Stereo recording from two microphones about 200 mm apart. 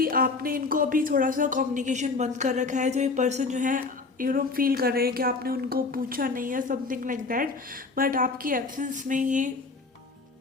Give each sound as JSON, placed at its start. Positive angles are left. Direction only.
{"t": 0.0, "sound": "speech", "side_deg": -45}